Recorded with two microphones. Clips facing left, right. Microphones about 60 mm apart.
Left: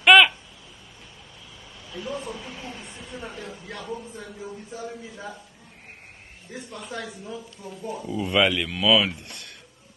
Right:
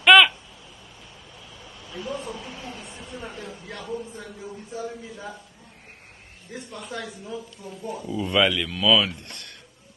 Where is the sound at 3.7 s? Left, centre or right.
Centre.